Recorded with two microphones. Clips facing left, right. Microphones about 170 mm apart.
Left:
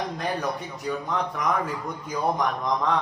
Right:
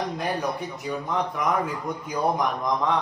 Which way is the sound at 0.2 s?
5° right (ahead or behind).